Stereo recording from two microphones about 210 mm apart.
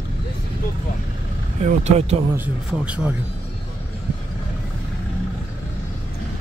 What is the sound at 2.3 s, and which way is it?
Speech, 5° right (ahead or behind).